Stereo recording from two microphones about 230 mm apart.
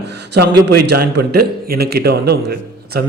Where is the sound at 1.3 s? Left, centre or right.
Right.